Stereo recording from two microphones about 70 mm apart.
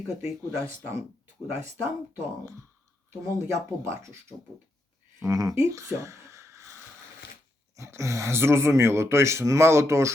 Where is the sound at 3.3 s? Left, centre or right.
Right.